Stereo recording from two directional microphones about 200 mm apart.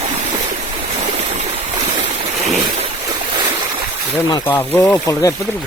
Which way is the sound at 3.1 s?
25° right (ahead or behind).